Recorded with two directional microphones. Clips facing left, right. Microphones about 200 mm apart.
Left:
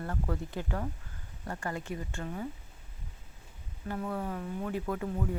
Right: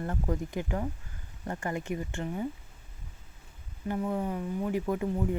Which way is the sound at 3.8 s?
15° right (ahead or behind).